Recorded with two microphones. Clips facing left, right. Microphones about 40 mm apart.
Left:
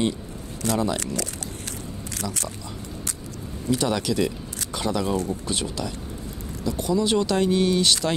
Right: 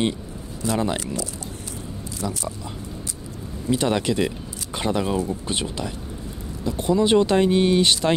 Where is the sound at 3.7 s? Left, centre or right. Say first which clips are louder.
Right 2 dB; right.